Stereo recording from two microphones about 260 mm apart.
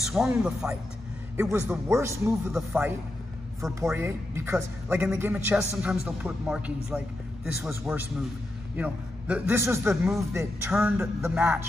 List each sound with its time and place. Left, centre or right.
0.0 s a man's voice: centre